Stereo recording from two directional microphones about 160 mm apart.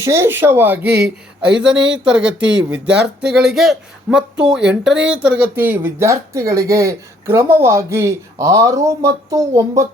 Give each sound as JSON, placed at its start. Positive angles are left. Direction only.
{"t": 0.0, "sound": "speech", "side_deg": -15}